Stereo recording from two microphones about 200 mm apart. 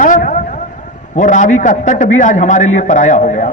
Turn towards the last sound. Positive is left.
turn(degrees=40)  # may be behind; listen again after turning